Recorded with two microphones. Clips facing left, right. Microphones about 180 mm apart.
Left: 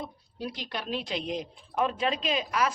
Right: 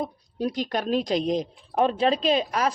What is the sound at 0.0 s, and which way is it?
A woman's voice, 45° right (ahead or behind).